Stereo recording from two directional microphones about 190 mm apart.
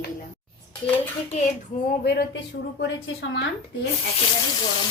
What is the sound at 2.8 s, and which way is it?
Speech, 75° left (ahead or behind).